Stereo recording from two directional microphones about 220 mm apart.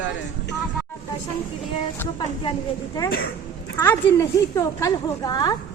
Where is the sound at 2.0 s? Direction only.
20° left (ahead or behind).